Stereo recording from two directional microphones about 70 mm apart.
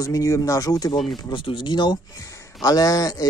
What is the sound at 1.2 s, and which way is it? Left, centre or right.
Speech, left.